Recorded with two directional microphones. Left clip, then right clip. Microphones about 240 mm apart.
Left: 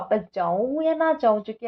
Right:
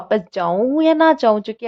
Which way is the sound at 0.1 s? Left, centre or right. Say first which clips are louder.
Right 5 dB; right.